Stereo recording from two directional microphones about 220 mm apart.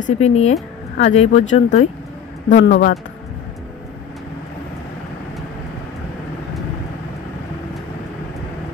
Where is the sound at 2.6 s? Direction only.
50° left (ahead or behind).